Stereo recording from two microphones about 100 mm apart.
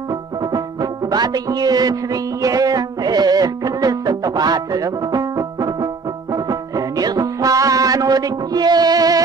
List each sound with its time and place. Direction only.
1.1 s speech: 40° right (ahead or behind)
2.4 s music: 35° right (ahead or behind)
7.0 s music: 40° right (ahead or behind)